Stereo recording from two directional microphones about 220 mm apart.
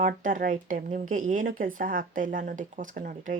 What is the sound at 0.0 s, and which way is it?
Speech, 35° right (ahead or behind).